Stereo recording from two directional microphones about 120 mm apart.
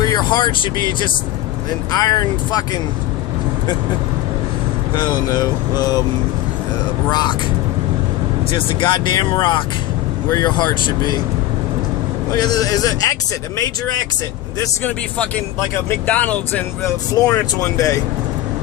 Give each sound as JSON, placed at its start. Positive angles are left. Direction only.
{"t": 0.0, "sound": "speech", "side_deg": 35}
{"t": 4.9, "sound": "speech", "side_deg": 35}
{"t": 7.1, "sound": "speech", "side_deg": 35}
{"t": 8.5, "sound": "speech", "side_deg": 45}
{"t": 12.3, "sound": "speech", "side_deg": 30}
{"t": 16.0, "sound": "speech", "side_deg": 10}
{"t": 17.2, "sound": "speech", "side_deg": 30}